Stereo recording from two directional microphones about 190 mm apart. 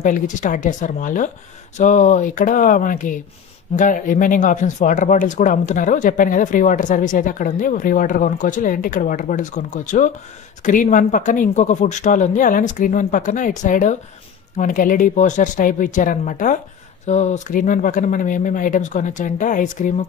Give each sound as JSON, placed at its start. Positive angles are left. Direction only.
{"t": 0.0, "sound": "speech", "side_deg": 45}